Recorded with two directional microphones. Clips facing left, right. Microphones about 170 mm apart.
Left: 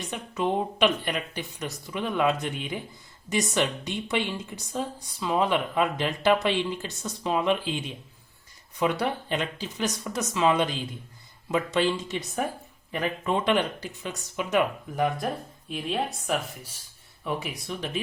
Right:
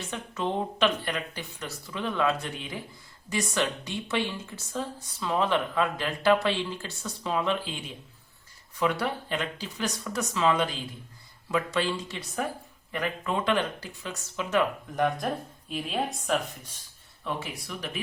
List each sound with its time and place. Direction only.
0.0 s speech: 15° left (ahead or behind)
8.8 s speech: 20° left (ahead or behind)
14.9 s speech: 5° left (ahead or behind)
17.2 s speech: 20° left (ahead or behind)